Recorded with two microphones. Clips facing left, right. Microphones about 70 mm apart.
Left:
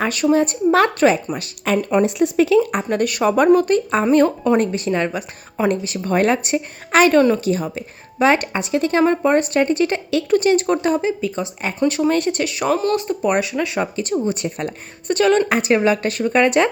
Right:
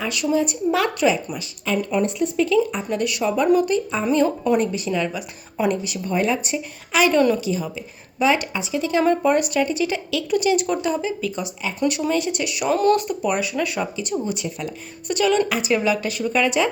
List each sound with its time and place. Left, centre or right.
0.0 s a woman's voice: left
1.4 s speech: left
2.0 s a woman's voice: left
6.1 s a woman's voice: left
9.0 s a woman's voice: left
13.5 s speech: left
13.9 s a woman's voice: left